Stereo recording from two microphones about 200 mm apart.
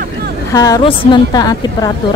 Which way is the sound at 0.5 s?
20° left (ahead or behind).